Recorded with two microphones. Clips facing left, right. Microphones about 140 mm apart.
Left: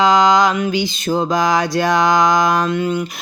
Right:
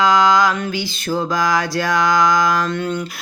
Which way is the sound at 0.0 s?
20° left (ahead or behind).